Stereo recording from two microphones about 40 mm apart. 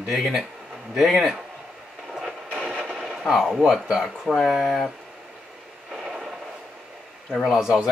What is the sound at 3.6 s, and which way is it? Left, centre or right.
Speech, centre.